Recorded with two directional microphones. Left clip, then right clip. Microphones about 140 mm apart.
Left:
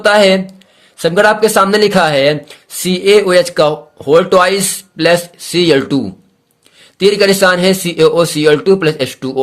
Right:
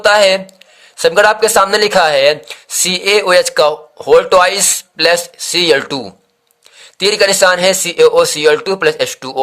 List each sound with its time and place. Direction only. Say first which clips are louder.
0.0 s speech: even; 30° right (ahead or behind)